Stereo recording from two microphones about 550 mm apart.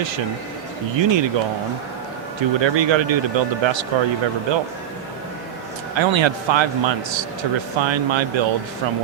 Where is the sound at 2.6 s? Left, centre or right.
Right.